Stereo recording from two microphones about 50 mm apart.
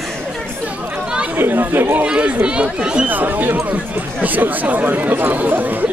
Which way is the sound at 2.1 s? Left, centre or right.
Right.